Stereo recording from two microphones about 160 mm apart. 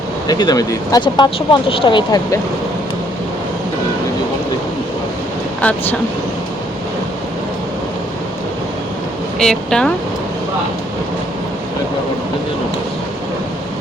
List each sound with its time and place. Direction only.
0.3 s speech: 25° left (ahead or behind)
5.5 s speech: 10° left (ahead or behind)
9.4 s speech: 5° left (ahead or behind)